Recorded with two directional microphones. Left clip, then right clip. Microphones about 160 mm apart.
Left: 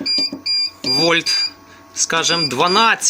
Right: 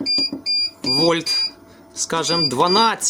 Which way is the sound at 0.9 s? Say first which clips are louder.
Left 3 dB; 20° right (ahead or behind).